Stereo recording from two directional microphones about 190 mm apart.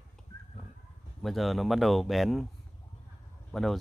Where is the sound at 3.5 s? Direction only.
Centre (ahead or behind).